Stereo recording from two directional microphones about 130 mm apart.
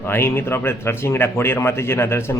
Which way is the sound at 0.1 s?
20° left (ahead or behind).